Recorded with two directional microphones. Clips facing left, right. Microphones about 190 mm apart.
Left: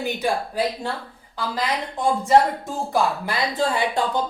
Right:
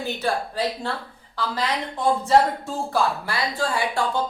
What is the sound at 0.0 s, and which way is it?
Speech, 15° left (ahead or behind).